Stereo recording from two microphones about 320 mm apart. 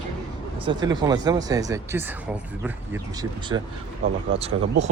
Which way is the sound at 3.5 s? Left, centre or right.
Centre.